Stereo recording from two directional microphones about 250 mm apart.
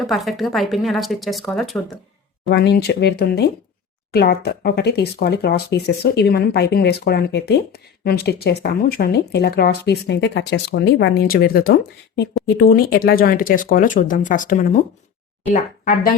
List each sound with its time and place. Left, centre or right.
0.0 s speech: centre
2.5 s speech: left